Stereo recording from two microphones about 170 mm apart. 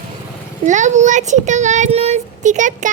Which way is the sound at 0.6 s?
45° right (ahead or behind).